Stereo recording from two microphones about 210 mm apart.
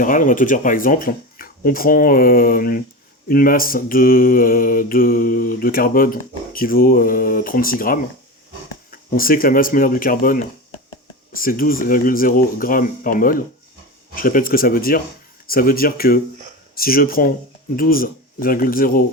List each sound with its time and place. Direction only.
0.0 s mantra: 40° left (ahead or behind)
8.9 s speech: 40° left (ahead or behind)
14.2 s mantra: 40° left (ahead or behind)